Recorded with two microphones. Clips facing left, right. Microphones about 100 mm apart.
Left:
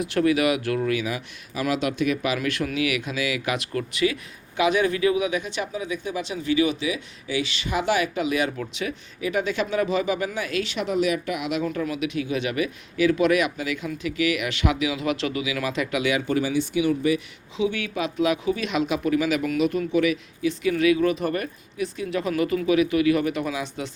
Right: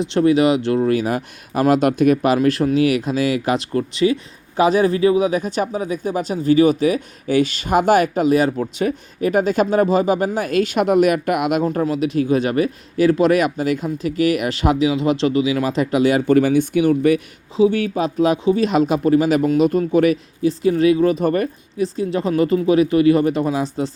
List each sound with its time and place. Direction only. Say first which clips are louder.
0.0 s speech: right 6 dB; 30° right (ahead or behind); by 11.6 s 55° right (ahead or behind)
11.6 s speech: right 7 dB; 40° right (ahead or behind)